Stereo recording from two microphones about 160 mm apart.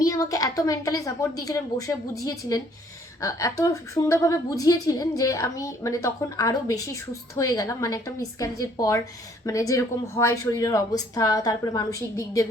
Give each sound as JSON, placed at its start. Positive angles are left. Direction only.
{"t": 0.0, "sound": "a woman's voice", "side_deg": 20}